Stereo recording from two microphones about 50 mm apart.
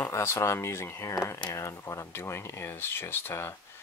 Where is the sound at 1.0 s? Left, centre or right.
Left.